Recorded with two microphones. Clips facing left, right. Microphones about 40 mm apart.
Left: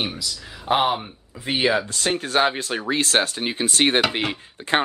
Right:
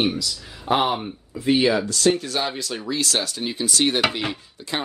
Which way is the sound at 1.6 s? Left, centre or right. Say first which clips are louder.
Left 2 dB; left.